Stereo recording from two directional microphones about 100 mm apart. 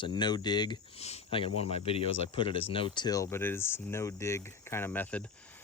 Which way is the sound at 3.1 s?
30° left (ahead or behind).